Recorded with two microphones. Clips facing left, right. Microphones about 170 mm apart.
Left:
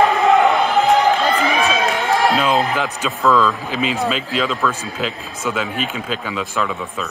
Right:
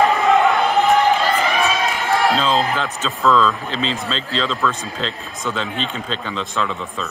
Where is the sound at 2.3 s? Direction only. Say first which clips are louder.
Left 1 dB; 15° left (ahead or behind).